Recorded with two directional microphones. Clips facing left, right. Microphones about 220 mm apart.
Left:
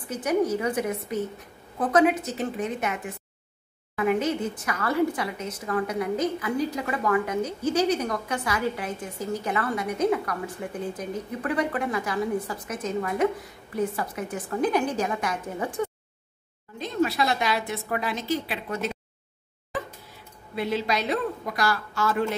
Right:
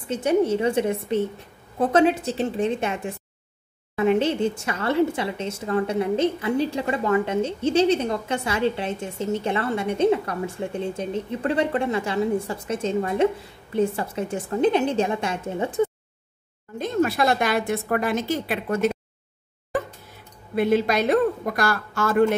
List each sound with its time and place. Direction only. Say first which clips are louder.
0.1 s speech: right 4 dB; 25° right (ahead or behind)
16.7 s a woman's voice: right 3 dB; 50° right (ahead or behind)
20.5 s a woman's voice: right 7 dB; 50° right (ahead or behind)